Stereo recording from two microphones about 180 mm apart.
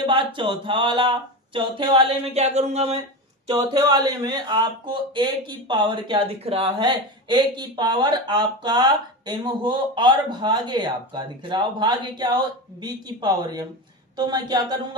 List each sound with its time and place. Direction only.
0.0 s speech: 30° right (ahead or behind)
3.5 s speech: 20° right (ahead or behind)